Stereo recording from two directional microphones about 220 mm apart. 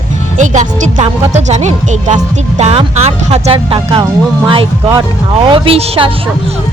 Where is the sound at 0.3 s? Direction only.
35° right (ahead or behind).